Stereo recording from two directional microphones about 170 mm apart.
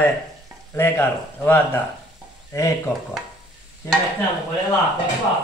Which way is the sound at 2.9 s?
5° right (ahead or behind).